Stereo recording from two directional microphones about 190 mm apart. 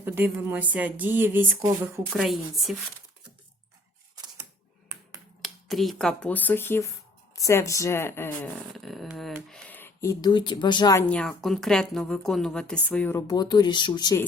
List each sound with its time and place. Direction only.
0.0 s speech: 10° right (ahead or behind)
2.0 s a woman's voice: centre (ahead or behind)
5.4 s speech: centre (ahead or behind)
8.7 s speech: centre (ahead or behind); by 11.0 s 20° left (ahead or behind)
11.1 s a woman's voice: centre (ahead or behind); by 14.3 s 20° left (ahead or behind)